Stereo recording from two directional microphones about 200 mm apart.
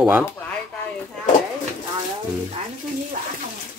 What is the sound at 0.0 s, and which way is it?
Speech, 5° right (ahead or behind).